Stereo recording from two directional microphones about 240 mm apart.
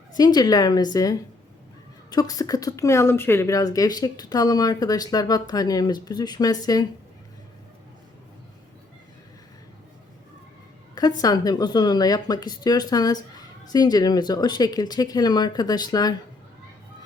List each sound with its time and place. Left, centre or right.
0.2 s a woman's voice: centre
11.2 s a woman's voice: centre